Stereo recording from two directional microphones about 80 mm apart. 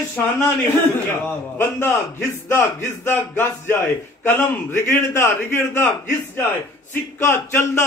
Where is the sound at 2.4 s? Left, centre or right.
Left.